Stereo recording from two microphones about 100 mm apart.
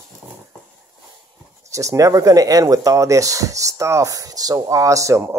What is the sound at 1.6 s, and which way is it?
Speech, 30° right (ahead or behind).